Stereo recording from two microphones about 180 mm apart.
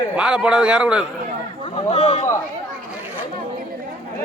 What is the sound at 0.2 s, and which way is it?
Speech, 5° right (ahead or behind).